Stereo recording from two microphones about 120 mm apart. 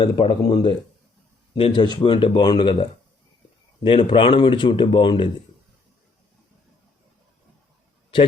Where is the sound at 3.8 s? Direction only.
45° left (ahead or behind).